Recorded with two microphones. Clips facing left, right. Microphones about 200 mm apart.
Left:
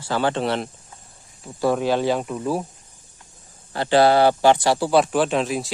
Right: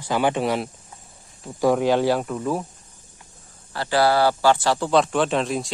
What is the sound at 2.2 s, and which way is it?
Speech, 10° left (ahead or behind).